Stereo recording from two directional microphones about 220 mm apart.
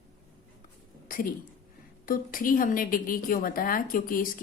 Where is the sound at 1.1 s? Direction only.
40° left (ahead or behind).